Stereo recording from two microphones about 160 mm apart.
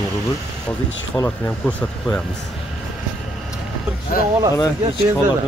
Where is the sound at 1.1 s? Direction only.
10° left (ahead or behind).